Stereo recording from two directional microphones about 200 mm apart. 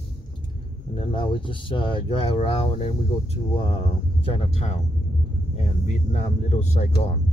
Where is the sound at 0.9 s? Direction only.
25° left (ahead or behind).